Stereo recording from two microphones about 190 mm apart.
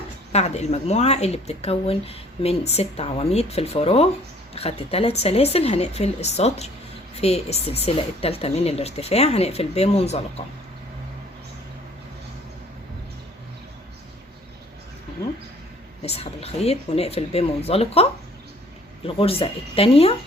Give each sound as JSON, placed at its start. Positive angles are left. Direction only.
{"t": 0.3, "sound": "speech", "side_deg": 35}
{"t": 16.0, "sound": "speech", "side_deg": 30}